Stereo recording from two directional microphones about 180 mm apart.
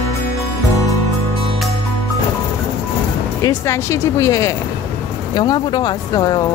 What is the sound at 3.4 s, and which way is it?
Speech, 15° left (ahead or behind).